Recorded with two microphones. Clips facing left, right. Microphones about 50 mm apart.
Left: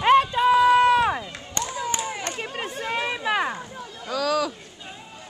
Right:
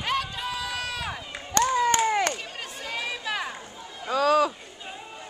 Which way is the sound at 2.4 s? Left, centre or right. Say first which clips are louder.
Left 6 dB; left.